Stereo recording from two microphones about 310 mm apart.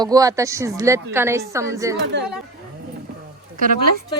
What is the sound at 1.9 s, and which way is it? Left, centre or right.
Speech, right.